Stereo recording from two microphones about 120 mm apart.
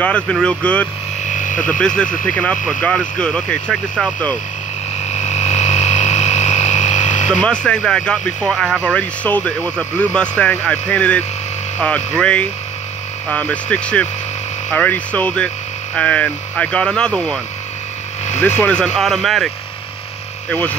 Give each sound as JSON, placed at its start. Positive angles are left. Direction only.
{"t": 0.0, "sound": "speech", "side_deg": 10}
{"t": 1.3, "sound": "a sound", "side_deg": 90}
{"t": 1.7, "sound": "speech", "side_deg": 10}
{"t": 5.1, "sound": "a sound", "side_deg": 75}
{"t": 7.4, "sound": "speech", "side_deg": 10}
{"t": 18.6, "sound": "speech", "side_deg": 10}
{"t": 20.4, "sound": "hum", "side_deg": 15}